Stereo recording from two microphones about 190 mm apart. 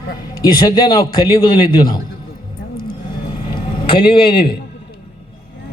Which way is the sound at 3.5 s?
25° left (ahead or behind).